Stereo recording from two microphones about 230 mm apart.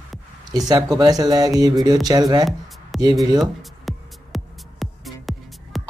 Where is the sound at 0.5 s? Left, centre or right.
Centre.